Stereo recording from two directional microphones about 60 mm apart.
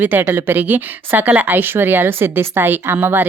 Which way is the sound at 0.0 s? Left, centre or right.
Right.